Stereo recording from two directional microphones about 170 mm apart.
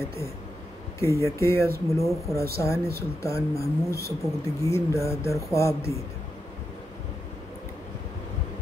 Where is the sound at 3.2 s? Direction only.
20° left (ahead or behind).